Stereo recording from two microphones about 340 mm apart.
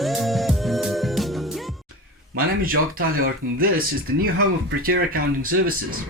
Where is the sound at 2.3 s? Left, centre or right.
Right.